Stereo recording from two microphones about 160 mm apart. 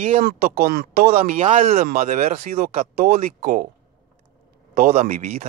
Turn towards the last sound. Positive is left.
turn(degrees=-55)  # may be behind; listen again after turning